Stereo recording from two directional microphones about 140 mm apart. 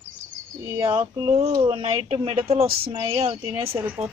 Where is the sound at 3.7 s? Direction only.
10° right (ahead or behind).